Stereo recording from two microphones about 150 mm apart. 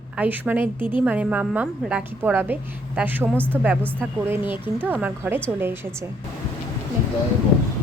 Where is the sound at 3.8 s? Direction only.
10° left (ahead or behind).